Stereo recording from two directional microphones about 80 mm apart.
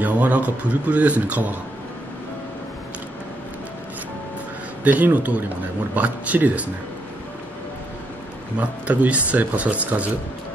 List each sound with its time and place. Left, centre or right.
0.0 s speech: centre
4.8 s speech: right
8.5 s speech: centre